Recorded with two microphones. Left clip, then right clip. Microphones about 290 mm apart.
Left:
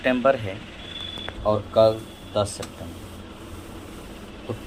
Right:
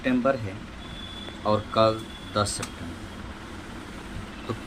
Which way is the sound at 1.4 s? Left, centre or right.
Centre.